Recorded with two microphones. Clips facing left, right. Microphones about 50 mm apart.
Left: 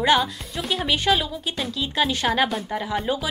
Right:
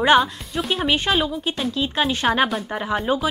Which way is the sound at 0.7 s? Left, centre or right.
Centre.